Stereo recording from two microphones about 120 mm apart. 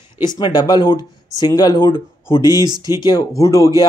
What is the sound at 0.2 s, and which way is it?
Speech, 35° left (ahead or behind).